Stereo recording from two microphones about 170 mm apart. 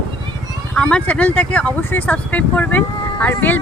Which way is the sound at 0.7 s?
5° left (ahead or behind).